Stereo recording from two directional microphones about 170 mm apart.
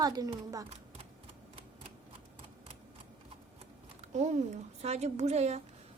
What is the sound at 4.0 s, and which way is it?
Speech, 45° right (ahead or behind).